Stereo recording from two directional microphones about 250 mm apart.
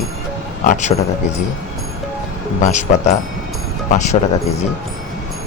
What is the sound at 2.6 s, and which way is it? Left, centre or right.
Speech, left.